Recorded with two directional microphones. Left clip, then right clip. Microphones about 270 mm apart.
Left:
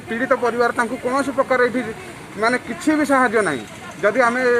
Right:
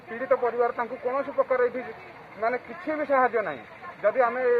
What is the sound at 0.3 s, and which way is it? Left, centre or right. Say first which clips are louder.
Speech: left 5 dB; centre.